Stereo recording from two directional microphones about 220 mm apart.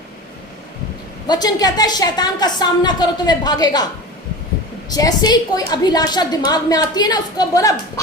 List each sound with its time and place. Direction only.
1.3 s a woman's voice: 20° left (ahead or behind)
4.9 s a woman's voice: 15° left (ahead or behind)